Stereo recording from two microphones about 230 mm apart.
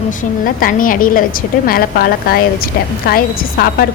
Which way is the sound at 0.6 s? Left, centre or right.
Left.